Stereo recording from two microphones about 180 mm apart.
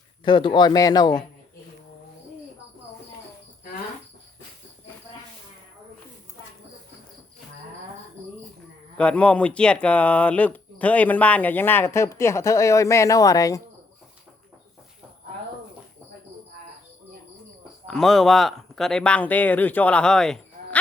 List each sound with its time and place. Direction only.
0.3 s speech: 25° left (ahead or behind)
9.0 s speech: 5° left (ahead or behind)
17.8 s speech: centre (ahead or behind)